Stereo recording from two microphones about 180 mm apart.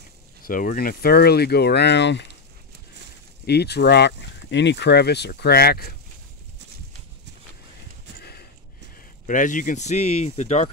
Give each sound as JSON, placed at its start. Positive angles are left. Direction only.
{"t": 0.4, "sound": "speech", "side_deg": 50}
{"t": 3.4, "sound": "speech", "side_deg": 65}
{"t": 9.2, "sound": "speech", "side_deg": 45}